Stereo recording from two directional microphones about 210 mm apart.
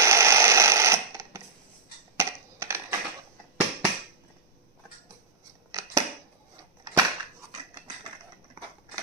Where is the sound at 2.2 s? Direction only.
15° right (ahead or behind).